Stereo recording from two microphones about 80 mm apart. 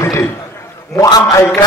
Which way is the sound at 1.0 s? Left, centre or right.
Left.